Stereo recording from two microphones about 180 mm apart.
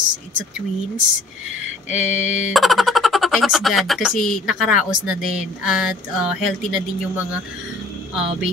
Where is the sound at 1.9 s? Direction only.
45° left (ahead or behind).